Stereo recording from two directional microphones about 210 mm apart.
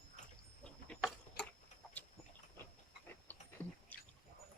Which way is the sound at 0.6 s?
5° left (ahead or behind).